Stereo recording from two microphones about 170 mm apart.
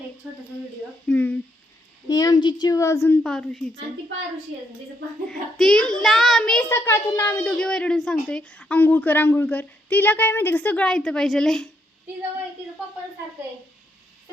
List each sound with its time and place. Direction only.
1.0 s a woman's voice: 10° left (ahead or behind)
2.0 s a woman's voice: 20° left (ahead or behind)
3.2 s a child's voice: 5° left (ahead or behind)
5.3 s a child's voice: 5° left (ahead or behind)
6.7 s a woman's voice: 15° left (ahead or behind)